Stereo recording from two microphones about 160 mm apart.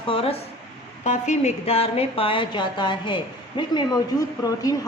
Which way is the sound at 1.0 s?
45° left (ahead or behind).